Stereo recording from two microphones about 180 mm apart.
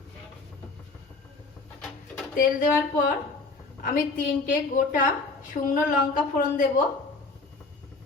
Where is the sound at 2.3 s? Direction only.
50° left (ahead or behind).